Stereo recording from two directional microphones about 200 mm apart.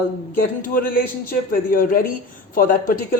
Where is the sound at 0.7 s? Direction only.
45° left (ahead or behind).